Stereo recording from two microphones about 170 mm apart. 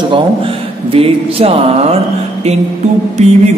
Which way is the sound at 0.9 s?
35° right (ahead or behind).